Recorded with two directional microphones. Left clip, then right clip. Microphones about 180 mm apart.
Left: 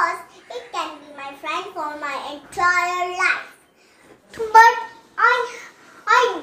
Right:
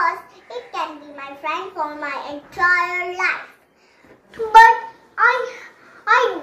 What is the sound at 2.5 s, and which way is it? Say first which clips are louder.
Speech: right 1 dB; centre (ahead or behind).